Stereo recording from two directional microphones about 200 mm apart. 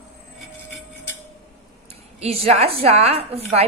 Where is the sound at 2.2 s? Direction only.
30° right (ahead or behind).